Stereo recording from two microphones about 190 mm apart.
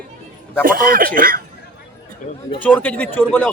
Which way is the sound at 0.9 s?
45° right (ahead or behind).